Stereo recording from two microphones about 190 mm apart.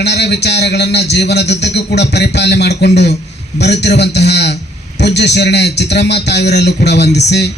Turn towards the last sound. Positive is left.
turn(degrees=60)  # may be behind; listen again after turning